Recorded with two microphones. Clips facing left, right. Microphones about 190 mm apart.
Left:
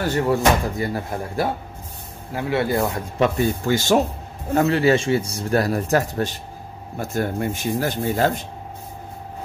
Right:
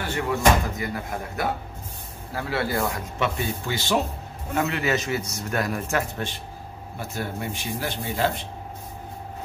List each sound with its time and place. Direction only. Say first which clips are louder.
0.0 s speech: left 4 dB; 40° left (ahead or behind)
2.3 s speech: left 5 dB; 20° left (ahead or behind)
3.2 s speech: left 9 dB; 45° left (ahead or behind)
4.5 s speech: left 7 dB; 35° left (ahead or behind)